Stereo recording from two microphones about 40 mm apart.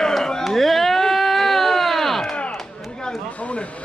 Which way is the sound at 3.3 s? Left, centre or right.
Left.